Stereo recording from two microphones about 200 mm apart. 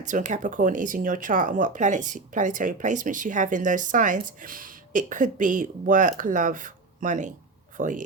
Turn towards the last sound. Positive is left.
turn(degrees=-40)  # may be behind; listen again after turning